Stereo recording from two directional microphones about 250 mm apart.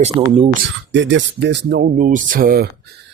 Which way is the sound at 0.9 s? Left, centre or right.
Right.